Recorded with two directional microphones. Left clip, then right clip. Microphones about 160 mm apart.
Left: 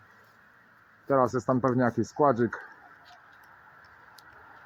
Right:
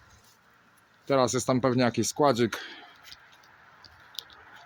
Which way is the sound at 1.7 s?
40° right (ahead or behind).